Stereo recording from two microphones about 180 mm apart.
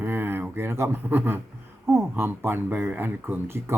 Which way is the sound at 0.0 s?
10° right (ahead or behind).